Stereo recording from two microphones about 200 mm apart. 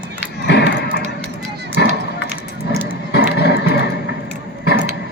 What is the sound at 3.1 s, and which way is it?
Music, 55° left (ahead or behind).